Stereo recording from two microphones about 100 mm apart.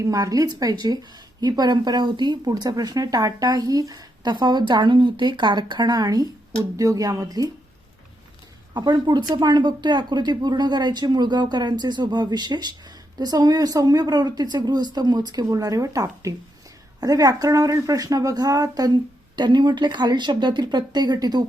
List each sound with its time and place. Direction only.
0.0 s speech: 35° right (ahead or behind)
8.7 s speech: 45° right (ahead or behind)